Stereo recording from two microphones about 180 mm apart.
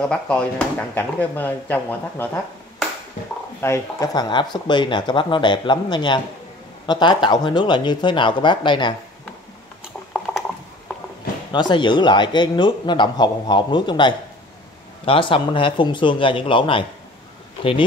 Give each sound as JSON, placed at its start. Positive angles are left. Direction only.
{"t": 0.0, "sound": "speech", "side_deg": 5}
{"t": 3.6, "sound": "speech", "side_deg": 15}
{"t": 11.5, "sound": "speech", "side_deg": 25}